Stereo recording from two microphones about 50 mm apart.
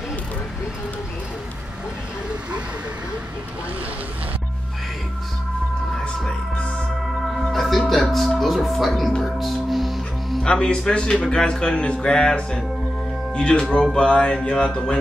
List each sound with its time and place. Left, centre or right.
5.9 s music: centre
7.5 s music: centre
7.9 s speech: centre
10.4 s speech: centre